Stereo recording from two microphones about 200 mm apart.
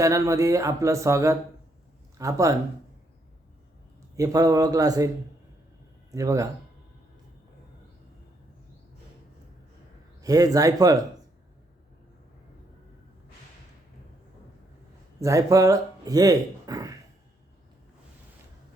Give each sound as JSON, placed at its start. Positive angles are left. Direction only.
{"t": 0.0, "sound": "speech", "side_deg": -15}
{"t": 4.2, "sound": "a man's voice", "side_deg": -15}
{"t": 6.1, "sound": "speech", "side_deg": -15}
{"t": 10.2, "sound": "speech", "side_deg": -15}
{"t": 15.2, "sound": "speech", "side_deg": -15}